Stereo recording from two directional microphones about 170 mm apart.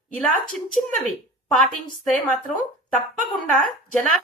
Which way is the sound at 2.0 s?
5° left (ahead or behind).